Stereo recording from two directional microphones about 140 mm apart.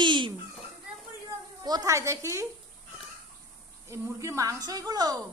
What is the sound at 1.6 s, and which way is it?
Speech, 25° right (ahead or behind).